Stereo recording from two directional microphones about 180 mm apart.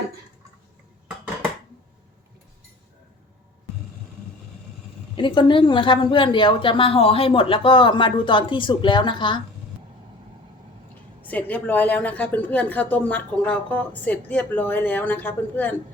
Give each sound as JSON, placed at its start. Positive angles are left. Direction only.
{"t": 5.1, "sound": "a woman's voice", "side_deg": 25}
{"t": 11.2, "sound": "speech", "side_deg": 10}